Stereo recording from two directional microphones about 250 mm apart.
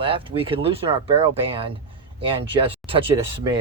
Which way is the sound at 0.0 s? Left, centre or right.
Right.